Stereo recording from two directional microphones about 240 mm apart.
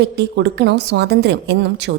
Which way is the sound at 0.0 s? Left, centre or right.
Right.